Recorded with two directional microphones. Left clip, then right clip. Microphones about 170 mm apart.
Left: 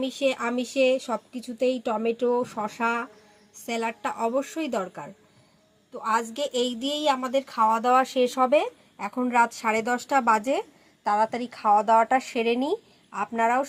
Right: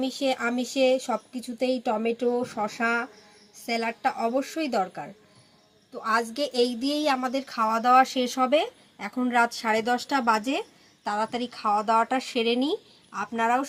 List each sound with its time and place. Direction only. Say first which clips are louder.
0.0 s a woman's voice: left 1 dB; 30° left (ahead or behind); by 13.7 s 50° left (ahead or behind)